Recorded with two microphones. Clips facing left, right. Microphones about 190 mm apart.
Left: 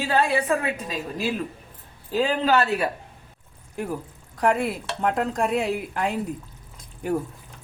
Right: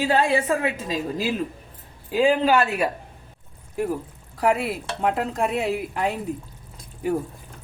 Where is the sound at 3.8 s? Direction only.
5° right (ahead or behind).